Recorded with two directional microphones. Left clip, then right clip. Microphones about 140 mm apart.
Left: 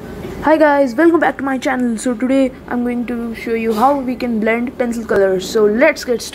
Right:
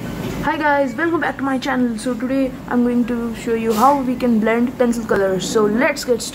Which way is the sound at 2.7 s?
5° left (ahead or behind).